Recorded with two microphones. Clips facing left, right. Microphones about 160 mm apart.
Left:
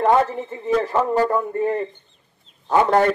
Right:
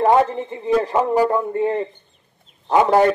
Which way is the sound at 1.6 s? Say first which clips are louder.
Right 1 dB; 25° right (ahead or behind).